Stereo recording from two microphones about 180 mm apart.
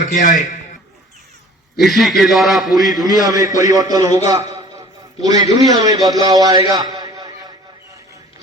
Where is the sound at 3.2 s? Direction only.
20° right (ahead or behind).